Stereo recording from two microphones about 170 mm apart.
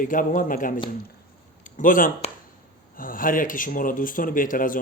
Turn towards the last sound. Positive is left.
turn(degrees=55)  # may be behind; listen again after turning